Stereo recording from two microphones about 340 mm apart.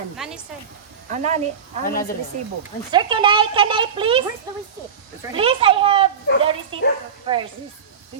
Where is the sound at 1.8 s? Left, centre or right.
Left.